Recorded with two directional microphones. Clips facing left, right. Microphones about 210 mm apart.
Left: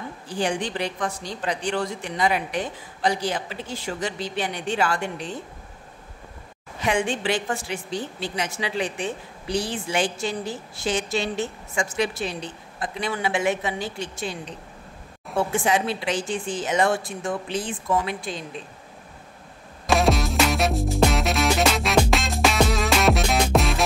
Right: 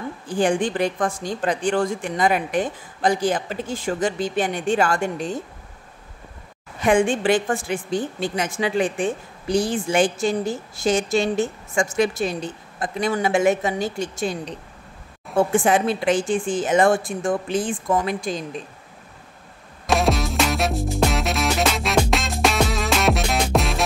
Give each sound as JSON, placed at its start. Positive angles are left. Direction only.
{"t": 0.3, "sound": "a woman's voice", "side_deg": -50}
{"t": 6.8, "sound": "a woman's voice", "side_deg": -50}
{"t": 15.5, "sound": "a woman's voice", "side_deg": -50}
{"t": 19.9, "sound": "music", "side_deg": 0}